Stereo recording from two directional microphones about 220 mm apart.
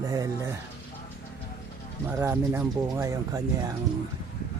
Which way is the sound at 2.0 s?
10° right (ahead or behind).